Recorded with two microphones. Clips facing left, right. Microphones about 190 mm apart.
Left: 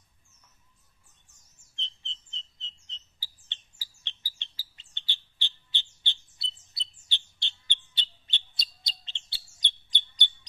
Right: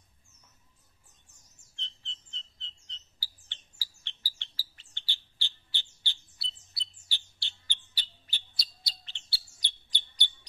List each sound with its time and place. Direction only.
2.6 s bird: 20° left (ahead or behind)